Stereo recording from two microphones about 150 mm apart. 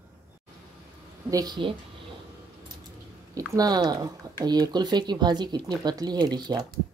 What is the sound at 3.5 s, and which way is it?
Speech, 25° right (ahead or behind).